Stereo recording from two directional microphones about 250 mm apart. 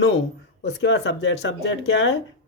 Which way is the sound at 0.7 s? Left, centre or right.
Left.